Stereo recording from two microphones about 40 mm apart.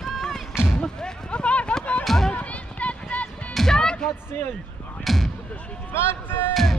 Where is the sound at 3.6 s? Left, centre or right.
Centre.